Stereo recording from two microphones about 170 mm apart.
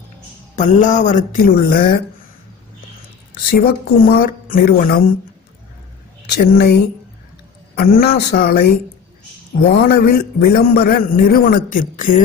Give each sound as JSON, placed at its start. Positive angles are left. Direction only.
{"t": 0.6, "sound": "a man's voice", "side_deg": 45}
{"t": 3.4, "sound": "a man's voice", "side_deg": 65}
{"t": 6.2, "sound": "speech", "side_deg": 70}
{"t": 7.7, "sound": "a man's voice", "side_deg": 60}